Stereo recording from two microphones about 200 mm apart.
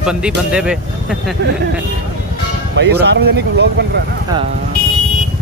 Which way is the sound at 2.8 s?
55° right (ahead or behind).